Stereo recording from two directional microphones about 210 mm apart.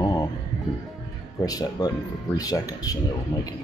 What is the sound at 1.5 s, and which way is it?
Speech, 20° left (ahead or behind).